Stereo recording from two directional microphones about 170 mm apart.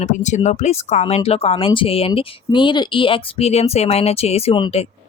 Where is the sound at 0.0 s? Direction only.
45° left (ahead or behind).